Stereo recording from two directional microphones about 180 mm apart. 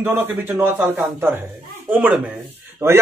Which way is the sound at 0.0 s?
10° right (ahead or behind).